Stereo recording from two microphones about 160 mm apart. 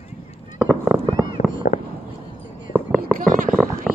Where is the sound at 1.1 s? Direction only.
25° right (ahead or behind).